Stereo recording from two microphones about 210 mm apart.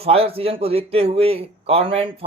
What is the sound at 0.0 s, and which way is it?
Speech, 30° right (ahead or behind).